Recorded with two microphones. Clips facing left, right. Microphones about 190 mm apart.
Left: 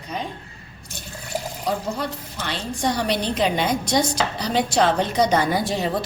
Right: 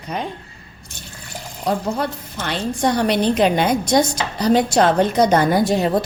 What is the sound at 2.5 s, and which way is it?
Speech, 55° right (ahead or behind).